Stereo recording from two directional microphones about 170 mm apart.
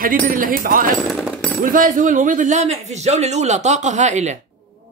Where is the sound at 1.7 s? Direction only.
50° right (ahead or behind).